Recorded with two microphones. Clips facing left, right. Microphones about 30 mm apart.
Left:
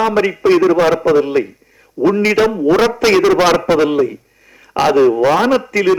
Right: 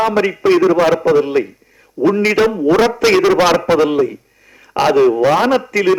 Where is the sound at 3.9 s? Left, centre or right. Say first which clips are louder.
Even; centre.